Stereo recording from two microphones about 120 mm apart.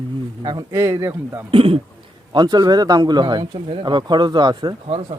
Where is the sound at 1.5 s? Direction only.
50° right (ahead or behind).